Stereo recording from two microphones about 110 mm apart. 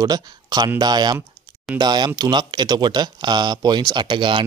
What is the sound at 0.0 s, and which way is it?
A man's voice, 40° right (ahead or behind).